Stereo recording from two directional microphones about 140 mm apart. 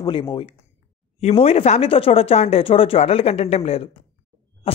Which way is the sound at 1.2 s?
45° left (ahead or behind).